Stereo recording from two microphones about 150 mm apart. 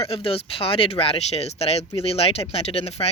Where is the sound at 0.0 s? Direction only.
40° left (ahead or behind).